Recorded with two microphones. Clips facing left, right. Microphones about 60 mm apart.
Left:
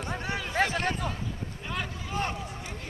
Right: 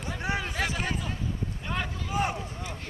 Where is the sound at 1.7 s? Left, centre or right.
Centre.